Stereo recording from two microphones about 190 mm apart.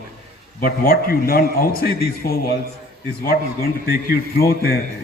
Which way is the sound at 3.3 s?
55° left (ahead or behind).